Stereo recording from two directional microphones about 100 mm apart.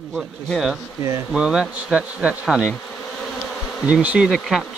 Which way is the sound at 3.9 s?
10° right (ahead or behind).